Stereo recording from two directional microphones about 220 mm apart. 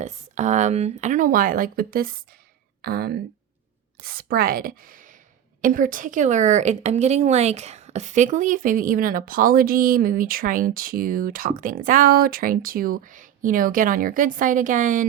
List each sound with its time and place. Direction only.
0.0 s a woman's voice: 30° right (ahead or behind)